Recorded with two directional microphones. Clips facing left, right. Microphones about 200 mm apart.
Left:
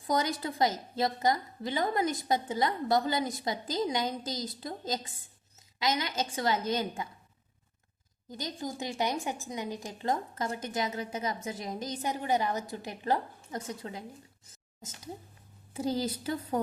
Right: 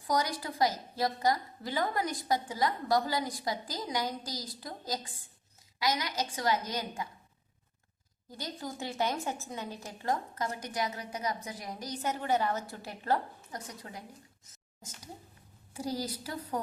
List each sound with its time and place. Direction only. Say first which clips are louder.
0.1 s a woman's voice: left 2 dB; 25° left (ahead or behind)
8.3 s a woman's voice: left 3 dB; 20° left (ahead or behind)
14.4 s a sound: left 3 dB; 25° left (ahead or behind)
15.7 s a woman's voice: left 4 dB; 25° left (ahead or behind)